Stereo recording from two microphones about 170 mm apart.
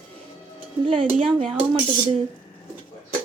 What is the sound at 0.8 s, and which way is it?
Speech, 30° right (ahead or behind).